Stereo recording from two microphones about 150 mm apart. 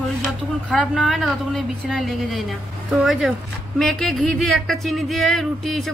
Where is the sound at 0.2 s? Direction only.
5° left (ahead or behind).